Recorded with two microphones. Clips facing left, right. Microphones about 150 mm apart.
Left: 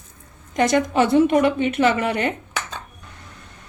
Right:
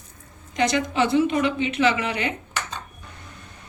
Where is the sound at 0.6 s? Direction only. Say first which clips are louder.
Left 4 dB; 50° left (ahead or behind).